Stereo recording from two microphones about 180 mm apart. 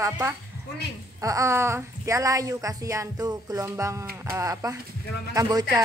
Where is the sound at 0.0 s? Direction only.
15° right (ahead or behind).